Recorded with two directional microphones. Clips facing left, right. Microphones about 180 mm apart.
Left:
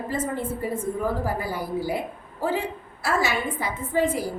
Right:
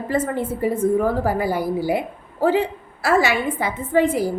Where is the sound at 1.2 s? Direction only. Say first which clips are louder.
Right 7 dB; 70° right (ahead or behind).